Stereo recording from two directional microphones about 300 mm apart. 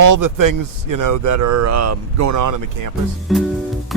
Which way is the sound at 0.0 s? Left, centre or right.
Right.